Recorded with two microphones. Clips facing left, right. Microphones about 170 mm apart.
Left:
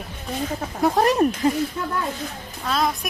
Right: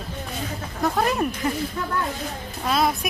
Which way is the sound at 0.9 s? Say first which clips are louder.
Left 6 dB; 30° left (ahead or behind).